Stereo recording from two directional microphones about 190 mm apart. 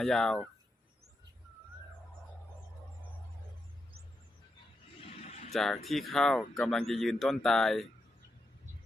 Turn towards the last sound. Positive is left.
turn(degrees=0)  # may be behind; listen again after turning